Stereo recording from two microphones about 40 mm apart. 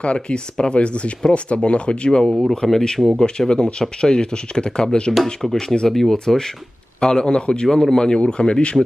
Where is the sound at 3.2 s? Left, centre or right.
Left.